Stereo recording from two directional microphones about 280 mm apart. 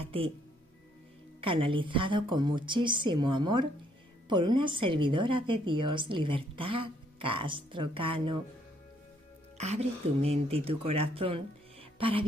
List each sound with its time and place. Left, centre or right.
1.4 s a woman's voice: centre
9.6 s speech: right